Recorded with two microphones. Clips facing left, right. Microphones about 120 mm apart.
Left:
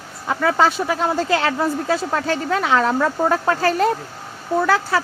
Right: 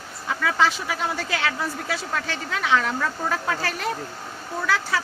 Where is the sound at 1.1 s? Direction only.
35° left (ahead or behind).